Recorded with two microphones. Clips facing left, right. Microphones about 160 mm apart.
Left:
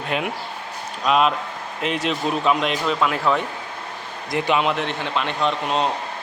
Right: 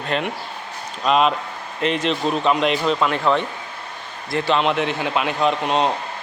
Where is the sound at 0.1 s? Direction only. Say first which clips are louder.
Right 1 dB; 10° left (ahead or behind).